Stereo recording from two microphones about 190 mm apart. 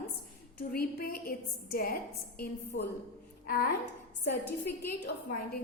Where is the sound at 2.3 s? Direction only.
65° left (ahead or behind).